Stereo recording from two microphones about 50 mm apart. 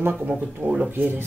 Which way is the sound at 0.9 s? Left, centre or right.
Right.